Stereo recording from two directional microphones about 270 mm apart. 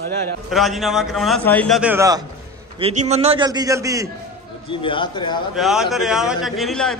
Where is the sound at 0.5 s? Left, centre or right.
Centre.